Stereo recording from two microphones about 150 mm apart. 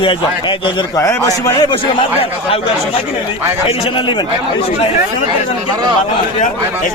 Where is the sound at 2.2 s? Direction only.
40° left (ahead or behind).